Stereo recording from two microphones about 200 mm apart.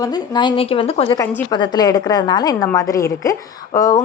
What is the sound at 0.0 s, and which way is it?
A woman's voice, 20° left (ahead or behind).